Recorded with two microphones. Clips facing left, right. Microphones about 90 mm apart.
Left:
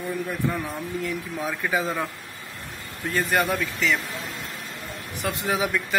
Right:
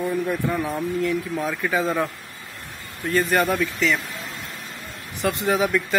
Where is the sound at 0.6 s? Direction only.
Centre (ahead or behind).